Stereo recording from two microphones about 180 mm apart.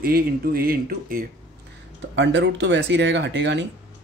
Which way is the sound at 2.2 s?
80° right.